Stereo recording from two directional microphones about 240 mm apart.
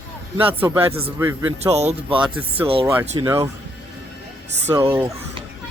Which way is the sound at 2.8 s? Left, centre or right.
Centre.